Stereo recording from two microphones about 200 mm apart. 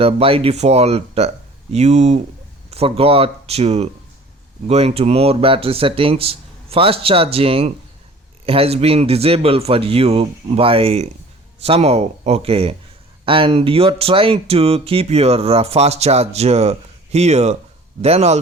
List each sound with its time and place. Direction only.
0.0 s speech: 30° right (ahead or behind)